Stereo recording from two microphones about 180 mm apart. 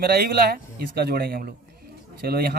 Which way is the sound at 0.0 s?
55° right (ahead or behind).